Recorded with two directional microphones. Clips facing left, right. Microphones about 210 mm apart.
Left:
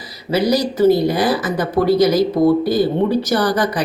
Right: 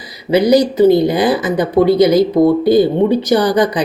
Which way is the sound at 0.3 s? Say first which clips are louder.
Right 6 dB; 20° right (ahead or behind).